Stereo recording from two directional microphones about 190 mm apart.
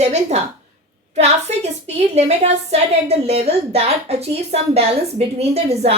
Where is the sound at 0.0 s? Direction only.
35° right (ahead or behind).